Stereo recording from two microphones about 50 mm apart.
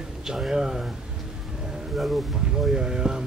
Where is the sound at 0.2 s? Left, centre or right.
Centre.